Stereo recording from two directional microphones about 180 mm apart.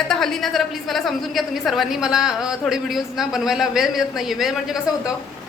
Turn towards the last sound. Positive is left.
turn(degrees=0)  # may be behind; listen again after turning